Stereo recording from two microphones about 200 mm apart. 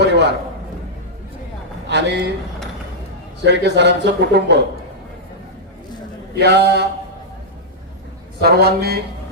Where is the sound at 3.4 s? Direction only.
60° right (ahead or behind).